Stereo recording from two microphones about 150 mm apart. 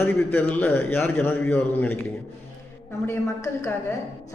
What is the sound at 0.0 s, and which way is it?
A man's voice, 15° left (ahead or behind).